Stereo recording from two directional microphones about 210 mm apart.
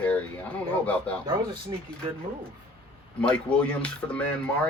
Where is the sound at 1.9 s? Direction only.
5° left (ahead or behind).